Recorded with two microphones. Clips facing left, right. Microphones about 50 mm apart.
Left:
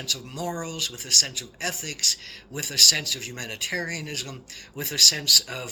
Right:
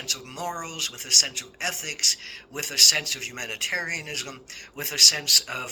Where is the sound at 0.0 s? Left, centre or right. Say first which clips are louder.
Left 1 dB; right.